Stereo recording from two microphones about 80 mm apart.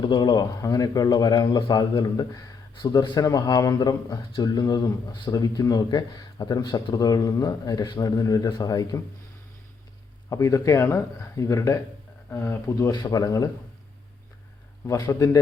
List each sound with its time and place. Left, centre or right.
0.0 s speech: left
0.6 s a man's voice: left
3.2 s speech: left
10.2 s speech: left
12.9 s speech: left